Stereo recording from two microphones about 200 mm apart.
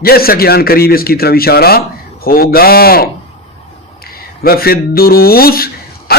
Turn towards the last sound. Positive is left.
turn(degrees=50)  # may be behind; listen again after turning